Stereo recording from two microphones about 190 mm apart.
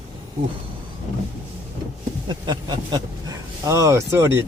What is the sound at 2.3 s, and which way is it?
Speech, 20° right (ahead or behind).